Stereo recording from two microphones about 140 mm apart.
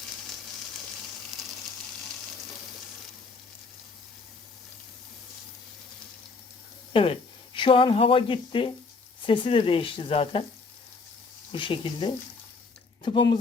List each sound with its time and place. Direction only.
1.3 s a sound: centre (ahead or behind)
6.9 s speech: 40° left (ahead or behind)
11.5 s speech: 40° left (ahead or behind)